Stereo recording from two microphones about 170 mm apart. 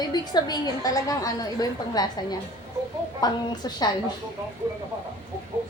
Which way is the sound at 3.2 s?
25° left (ahead or behind).